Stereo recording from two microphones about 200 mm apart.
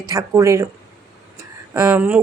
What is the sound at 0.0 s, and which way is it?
Speech, 15° right (ahead or behind).